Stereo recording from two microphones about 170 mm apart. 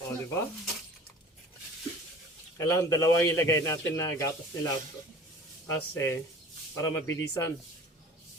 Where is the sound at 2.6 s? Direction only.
15° left (ahead or behind).